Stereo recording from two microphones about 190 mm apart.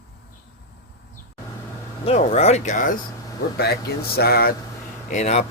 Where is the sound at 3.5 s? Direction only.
55° left (ahead or behind).